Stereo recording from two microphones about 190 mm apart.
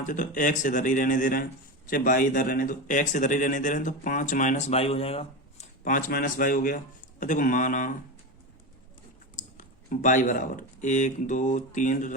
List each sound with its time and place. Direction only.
0.0 s speech: 45° left (ahead or behind)
5.8 s speech: 45° left (ahead or behind)
9.3 s speech: 40° left (ahead or behind)